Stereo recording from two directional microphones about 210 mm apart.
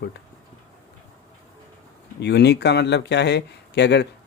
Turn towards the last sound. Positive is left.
turn(degrees=55)  # may be behind; listen again after turning